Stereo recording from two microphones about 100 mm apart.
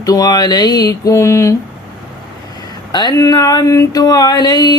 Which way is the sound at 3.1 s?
35° left (ahead or behind).